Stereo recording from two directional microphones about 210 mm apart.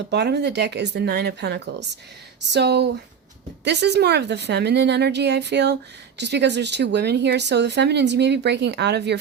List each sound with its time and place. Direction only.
0.1 s speech: 50° right (ahead or behind)